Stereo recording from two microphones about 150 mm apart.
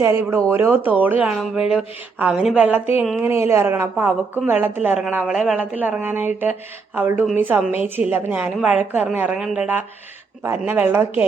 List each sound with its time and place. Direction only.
0.0 s a woman's voice: 20° right (ahead or behind)